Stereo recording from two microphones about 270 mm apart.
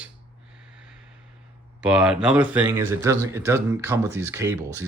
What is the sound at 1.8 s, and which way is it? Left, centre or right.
Speech, centre.